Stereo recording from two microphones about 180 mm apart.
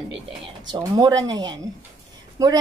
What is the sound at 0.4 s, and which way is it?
A woman's voice, 25° right (ahead or behind).